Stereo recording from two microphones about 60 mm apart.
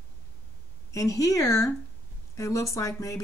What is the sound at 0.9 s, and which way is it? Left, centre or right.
Speech, left.